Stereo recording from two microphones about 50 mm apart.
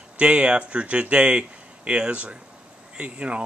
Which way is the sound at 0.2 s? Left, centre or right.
Right.